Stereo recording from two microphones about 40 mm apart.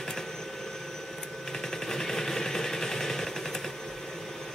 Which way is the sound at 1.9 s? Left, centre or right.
Centre.